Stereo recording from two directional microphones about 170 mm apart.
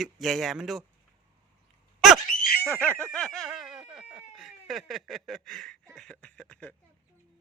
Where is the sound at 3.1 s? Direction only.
5° left (ahead or behind).